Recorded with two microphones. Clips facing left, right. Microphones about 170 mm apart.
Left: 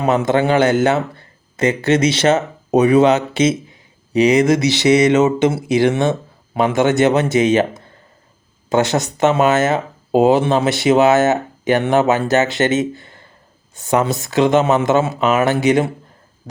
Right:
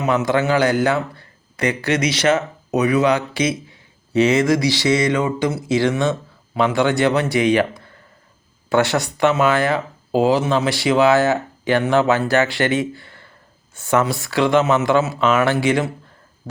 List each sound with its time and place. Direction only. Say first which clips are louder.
0.3 s speech: left 3 dB; 25° left (ahead or behind)